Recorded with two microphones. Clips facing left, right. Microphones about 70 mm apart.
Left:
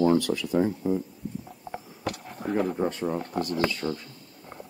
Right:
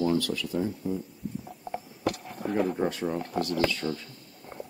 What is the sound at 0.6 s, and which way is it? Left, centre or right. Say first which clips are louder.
Speech: left 6 dB; left.